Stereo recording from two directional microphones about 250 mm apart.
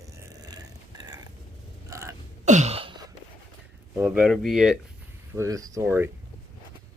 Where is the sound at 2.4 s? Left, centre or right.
Right.